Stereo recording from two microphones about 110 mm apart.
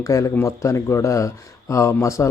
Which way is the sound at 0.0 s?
30° left (ahead or behind).